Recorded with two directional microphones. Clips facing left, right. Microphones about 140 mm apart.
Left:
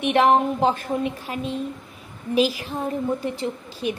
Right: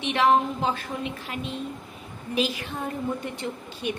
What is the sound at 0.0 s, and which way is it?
A woman's voice, 50° left (ahead or behind).